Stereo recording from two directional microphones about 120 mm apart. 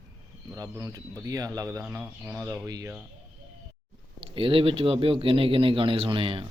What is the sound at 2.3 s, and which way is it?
Speech, 30° right (ahead or behind).